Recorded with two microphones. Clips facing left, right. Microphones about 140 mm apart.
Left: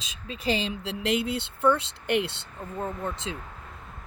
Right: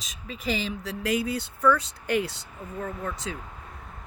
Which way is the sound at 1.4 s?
25° left (ahead or behind).